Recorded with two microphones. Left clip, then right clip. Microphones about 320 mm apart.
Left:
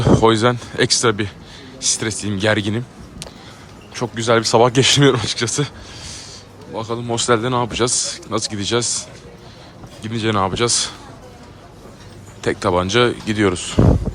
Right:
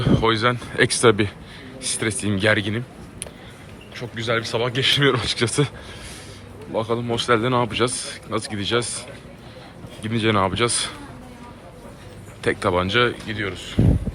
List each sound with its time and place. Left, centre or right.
0.2 s speech: centre
6.7 s speech: centre
12.4 s speech: centre